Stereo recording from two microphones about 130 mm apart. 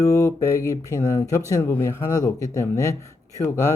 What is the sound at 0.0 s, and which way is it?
Speech, 25° left (ahead or behind).